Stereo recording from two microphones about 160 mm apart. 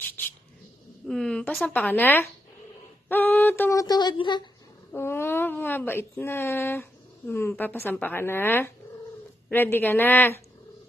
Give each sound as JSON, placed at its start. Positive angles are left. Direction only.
{"t": 1.0, "sound": "speech", "side_deg": 5}
{"t": 3.8, "sound": "speech", "side_deg": 25}
{"t": 4.9, "sound": "speech", "side_deg": 15}